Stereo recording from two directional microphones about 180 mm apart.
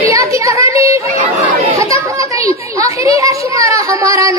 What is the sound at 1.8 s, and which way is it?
Chatter, 15° right (ahead or behind).